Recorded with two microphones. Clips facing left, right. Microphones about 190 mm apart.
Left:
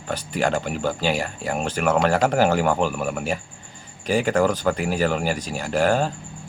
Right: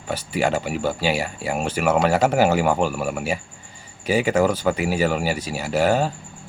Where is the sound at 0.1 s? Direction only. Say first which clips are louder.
Right 1 dB; 10° right (ahead or behind).